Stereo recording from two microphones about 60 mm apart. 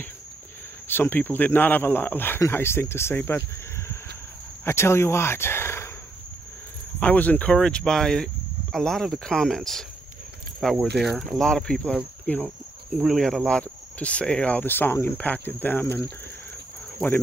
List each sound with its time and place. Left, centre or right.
0.8 s speech: left
4.6 s speech: left
7.0 s speech: left
7.5 s speech: centre
12.4 s speech: centre
13.2 s speech: centre
14.7 s speech: left
15.1 s speech: left